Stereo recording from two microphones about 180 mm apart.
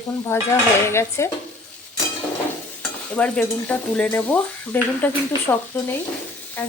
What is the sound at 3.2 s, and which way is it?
Speech, 5° left (ahead or behind).